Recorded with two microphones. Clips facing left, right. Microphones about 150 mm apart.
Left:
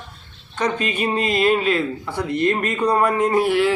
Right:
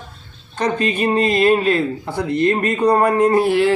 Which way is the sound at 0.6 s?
40° right (ahead or behind).